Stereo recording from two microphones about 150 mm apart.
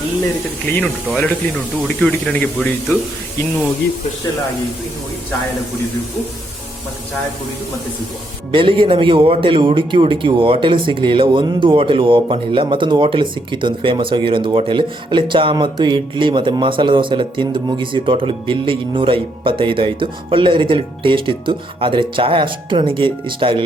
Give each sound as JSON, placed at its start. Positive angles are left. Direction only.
{"t": 1.1, "sound": "speech", "side_deg": 10}
{"t": 8.5, "sound": "speech", "side_deg": -35}